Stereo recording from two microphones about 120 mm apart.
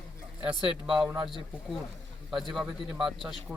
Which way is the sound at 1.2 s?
Centre (ahead or behind).